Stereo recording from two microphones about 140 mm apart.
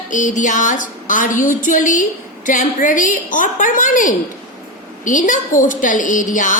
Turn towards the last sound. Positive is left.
turn(degrees=65)  # may be behind; listen again after turning